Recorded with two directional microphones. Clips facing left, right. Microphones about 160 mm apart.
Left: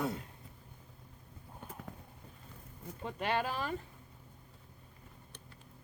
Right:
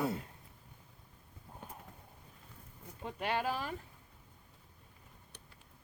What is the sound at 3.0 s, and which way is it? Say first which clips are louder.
Speech: left 1 dB; 5° right (ahead or behind).